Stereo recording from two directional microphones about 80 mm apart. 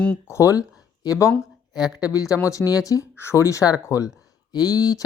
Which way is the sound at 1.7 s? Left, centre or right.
Centre.